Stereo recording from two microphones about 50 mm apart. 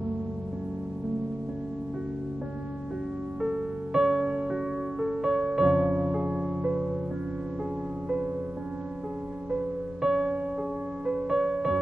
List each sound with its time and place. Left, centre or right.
3.3 s music: centre
10.0 s music: centre